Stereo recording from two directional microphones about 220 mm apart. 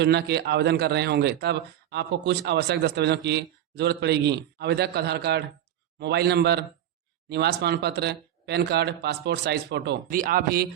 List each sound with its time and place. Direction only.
0.0 s a man's voice: 50° right (ahead or behind)